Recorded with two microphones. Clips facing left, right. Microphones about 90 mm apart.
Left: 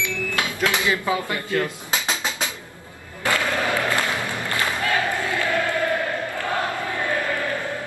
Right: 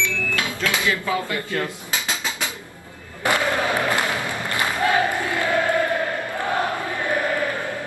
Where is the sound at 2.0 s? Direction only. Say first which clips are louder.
Left 1 dB; 20° left (ahead or behind).